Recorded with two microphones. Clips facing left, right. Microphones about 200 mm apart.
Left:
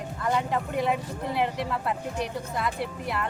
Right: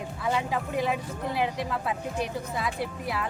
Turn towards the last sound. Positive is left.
turn(degrees=0)  # may be behind; listen again after turning